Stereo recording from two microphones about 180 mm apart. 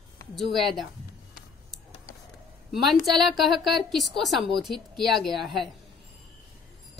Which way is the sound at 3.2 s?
Centre (ahead or behind).